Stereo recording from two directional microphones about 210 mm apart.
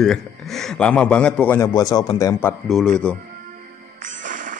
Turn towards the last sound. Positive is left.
turn(degrees=-40)  # may be behind; listen again after turning